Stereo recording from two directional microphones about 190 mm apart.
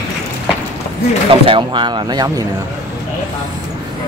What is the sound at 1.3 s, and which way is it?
Speech, 30° right (ahead or behind).